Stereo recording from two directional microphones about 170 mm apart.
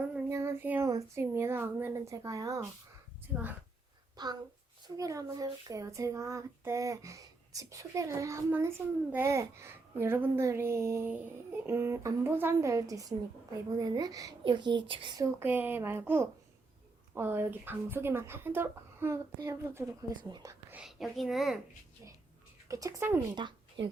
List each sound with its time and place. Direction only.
0.3 s a child's voice: 15° right (ahead or behind)
4.2 s child singing: 25° right (ahead or behind)
9.1 s a child's voice: 15° right (ahead or behind)
13.7 s child singing: 20° right (ahead or behind)
15.2 s a child's voice: 10° right (ahead or behind)
20.7 s a child's voice: centre (ahead or behind)
22.7 s a child's voice: 20° right (ahead or behind)
23.3 s child singing: 25° right (ahead or behind)
23.8 s speech: 90° right